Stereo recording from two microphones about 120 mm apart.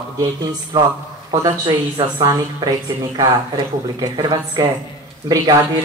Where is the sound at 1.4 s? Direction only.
30° right (ahead or behind).